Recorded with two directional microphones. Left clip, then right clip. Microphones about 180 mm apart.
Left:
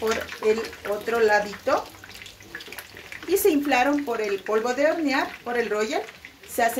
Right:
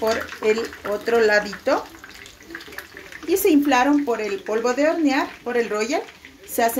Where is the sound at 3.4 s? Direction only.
35° right (ahead or behind).